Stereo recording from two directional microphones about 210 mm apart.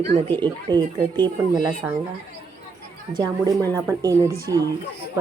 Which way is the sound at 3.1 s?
20° right (ahead or behind).